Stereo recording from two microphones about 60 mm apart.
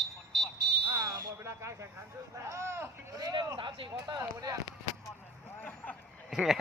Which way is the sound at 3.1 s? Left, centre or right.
Right.